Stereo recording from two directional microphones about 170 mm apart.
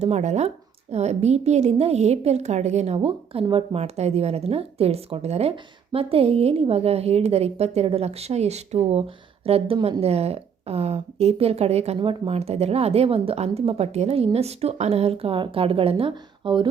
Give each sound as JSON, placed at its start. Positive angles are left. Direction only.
{"t": 0.0, "sound": "speech", "side_deg": -40}